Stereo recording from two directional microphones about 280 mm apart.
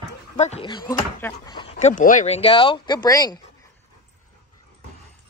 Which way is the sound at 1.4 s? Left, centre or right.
Centre.